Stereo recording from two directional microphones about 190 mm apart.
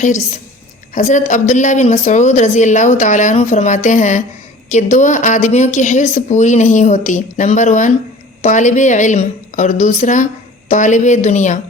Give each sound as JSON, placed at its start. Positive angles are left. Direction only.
{"t": 0.9, "sound": "speech", "side_deg": 40}